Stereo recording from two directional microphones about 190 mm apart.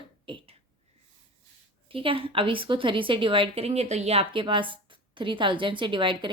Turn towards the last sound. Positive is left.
turn(degrees=-25)  # may be behind; listen again after turning